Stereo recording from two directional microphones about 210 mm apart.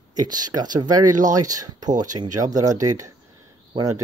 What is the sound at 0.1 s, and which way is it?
Speech, 20° right (ahead or behind).